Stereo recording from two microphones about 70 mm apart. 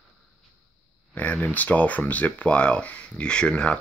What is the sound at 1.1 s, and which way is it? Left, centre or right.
Speech, left.